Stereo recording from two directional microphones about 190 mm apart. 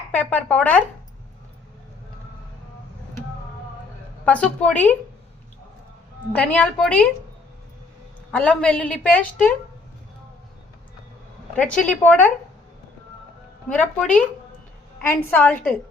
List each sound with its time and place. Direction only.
0.1 s a woman's voice: 10° left (ahead or behind)
4.3 s a woman's voice: 5° left (ahead or behind)
6.3 s a woman's voice: 10° left (ahead or behind)
8.3 s a woman's voice: 5° left (ahead or behind)
11.5 s a woman's voice: 5° left (ahead or behind)
13.7 s a woman's voice: 5° left (ahead or behind)